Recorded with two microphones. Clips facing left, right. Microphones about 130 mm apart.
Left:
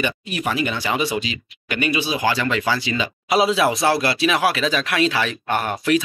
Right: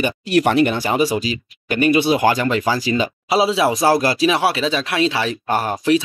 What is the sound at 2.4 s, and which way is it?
Speech, 40° right (ahead or behind).